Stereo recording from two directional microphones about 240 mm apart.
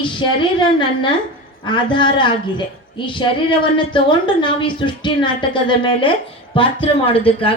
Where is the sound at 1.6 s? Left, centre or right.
Centre.